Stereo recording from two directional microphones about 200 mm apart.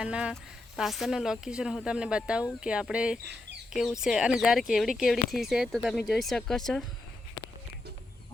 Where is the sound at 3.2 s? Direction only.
55° right (ahead or behind).